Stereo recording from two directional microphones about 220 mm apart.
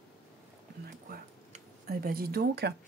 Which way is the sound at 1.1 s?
40° right (ahead or behind).